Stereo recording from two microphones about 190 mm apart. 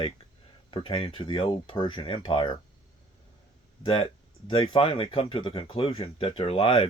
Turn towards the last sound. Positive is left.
turn(degrees=30)  # may be behind; listen again after turning